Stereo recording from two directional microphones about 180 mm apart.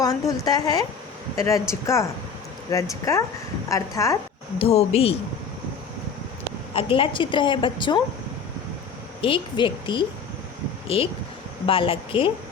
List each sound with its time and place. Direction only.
0.0 s a woman's voice: 20° left (ahead or behind)
4.5 s speech: 35° left (ahead or behind)
6.7 s a woman's voice: 30° left (ahead or behind)
9.2 s a woman's voice: 30° left (ahead or behind)